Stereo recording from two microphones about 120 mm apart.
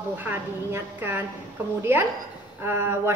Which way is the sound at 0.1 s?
15° right (ahead or behind).